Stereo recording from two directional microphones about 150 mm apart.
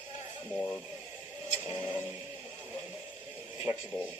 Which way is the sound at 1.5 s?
45° left (ahead or behind).